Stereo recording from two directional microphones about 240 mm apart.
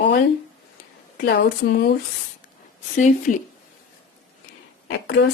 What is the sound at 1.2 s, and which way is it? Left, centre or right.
Speech, left.